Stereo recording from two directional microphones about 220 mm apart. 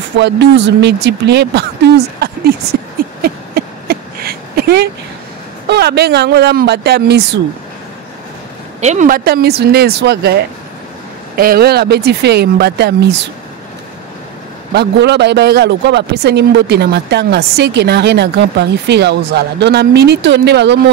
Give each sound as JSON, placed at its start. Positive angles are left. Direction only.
{"t": 0.2, "sound": "a man's voice", "side_deg": -55}
{"t": 3.2, "sound": "a sound", "side_deg": -45}
{"t": 5.7, "sound": "a man's voice", "side_deg": -50}
{"t": 8.8, "sound": "a man's voice", "side_deg": -35}
{"t": 14.7, "sound": "a man's voice", "side_deg": -50}